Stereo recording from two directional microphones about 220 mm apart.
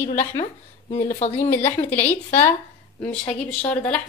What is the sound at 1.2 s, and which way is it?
Speech, 30° left (ahead or behind).